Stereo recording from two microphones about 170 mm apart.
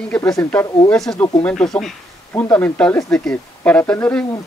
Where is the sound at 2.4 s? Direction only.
15° left (ahead or behind).